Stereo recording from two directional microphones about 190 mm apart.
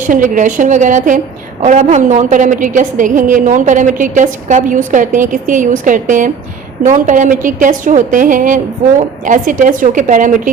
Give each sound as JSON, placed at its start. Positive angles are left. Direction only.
{"t": 0.0, "sound": "a woman's voice", "side_deg": -40}